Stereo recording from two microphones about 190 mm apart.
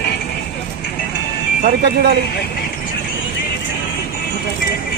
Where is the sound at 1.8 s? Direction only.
55° right (ahead or behind).